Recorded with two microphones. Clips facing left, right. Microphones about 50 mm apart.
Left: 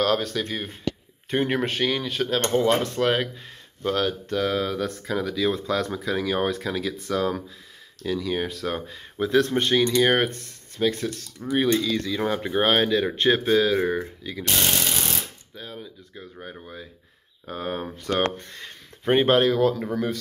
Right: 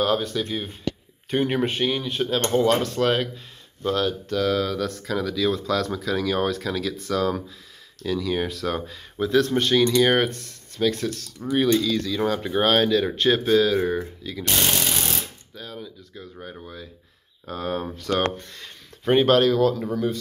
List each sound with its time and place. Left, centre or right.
0.0 s speech: left
0.3 s speech: left
1.3 s speech: left
1.7 s speech: left
2.5 s speech: left; by 9.0 s centre
9.2 s speech: left
9.5 s speech: centre
15.5 s a sound: left
17.5 s speech: left